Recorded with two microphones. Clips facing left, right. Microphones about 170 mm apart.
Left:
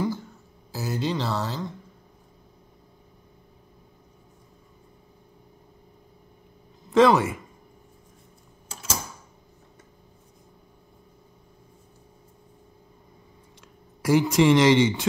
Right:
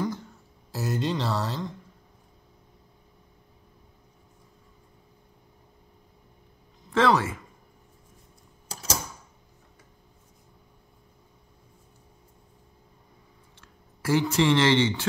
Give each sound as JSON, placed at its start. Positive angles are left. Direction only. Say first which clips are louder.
{"t": 0.0, "sound": "a sound", "louder": "left 3 dB", "side_deg": 0}
{"t": 6.9, "sound": "speech", "louder": "left 5 dB", "side_deg": 15}
{"t": 13.6, "sound": "speech", "louder": "left 4 dB", "side_deg": 10}